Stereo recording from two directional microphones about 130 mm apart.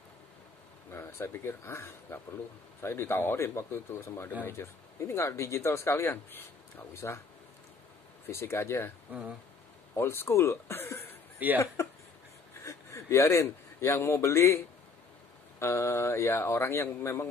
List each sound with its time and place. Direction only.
0.8 s speech: 20° left (ahead or behind)
8.3 s speech: 20° left (ahead or behind)
9.9 s speech: 20° left (ahead or behind)
11.3 s speech: 15° right (ahead or behind)
11.6 s a man's voice: 25° left (ahead or behind)
15.6 s speech: 20° left (ahead or behind)